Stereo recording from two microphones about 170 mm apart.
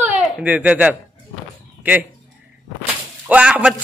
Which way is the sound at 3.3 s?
10° right (ahead or behind).